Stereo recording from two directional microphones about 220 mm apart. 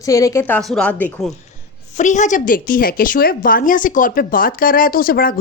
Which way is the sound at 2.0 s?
35° left (ahead or behind).